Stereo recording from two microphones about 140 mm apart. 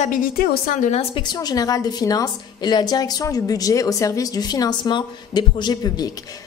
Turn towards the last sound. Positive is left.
turn(degrees=30)  # may be behind; listen again after turning